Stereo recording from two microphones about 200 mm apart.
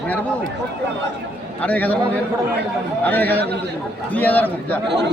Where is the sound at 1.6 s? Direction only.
10° left (ahead or behind).